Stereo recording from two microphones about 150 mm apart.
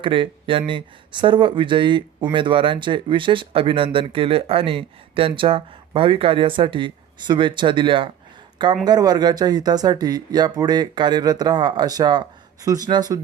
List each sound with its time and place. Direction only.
0.0 s speech: 35° right (ahead or behind)